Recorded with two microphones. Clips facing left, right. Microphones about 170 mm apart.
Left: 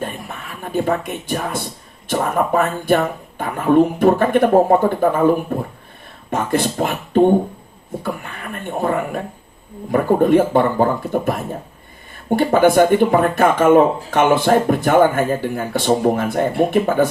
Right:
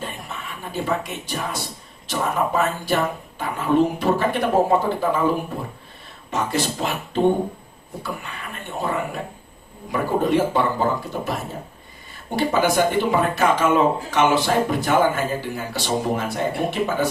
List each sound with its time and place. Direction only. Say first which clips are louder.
0.6 s speech: left 6 dB; 55° left (ahead or behind)
12.4 s speech: left 6 dB; 55° left (ahead or behind)